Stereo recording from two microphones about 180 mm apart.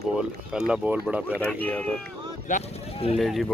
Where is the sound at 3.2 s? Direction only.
Centre (ahead or behind).